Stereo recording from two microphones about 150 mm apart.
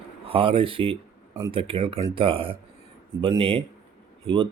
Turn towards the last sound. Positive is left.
turn(degrees=-35)  # may be behind; listen again after turning